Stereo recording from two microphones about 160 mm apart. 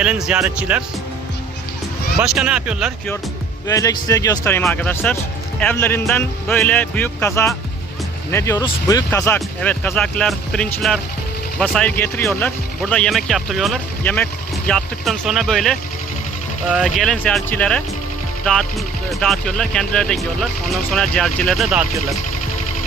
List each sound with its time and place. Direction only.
0.0 s speech: 5° right (ahead or behind)
2.2 s speech: 5° right (ahead or behind)
3.7 s speech: 20° left (ahead or behind); by 13.7 s centre (ahead or behind)
14.0 s speech: 10° left (ahead or behind)
19.2 s speech: 5° left (ahead or behind)